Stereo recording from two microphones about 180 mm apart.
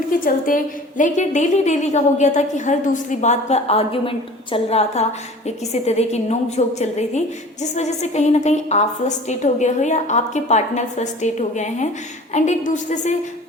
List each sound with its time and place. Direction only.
0.1 s a woman's voice: 50° left (ahead or behind)